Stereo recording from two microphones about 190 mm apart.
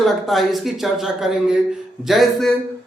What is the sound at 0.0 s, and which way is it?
Speech, centre (ahead or behind).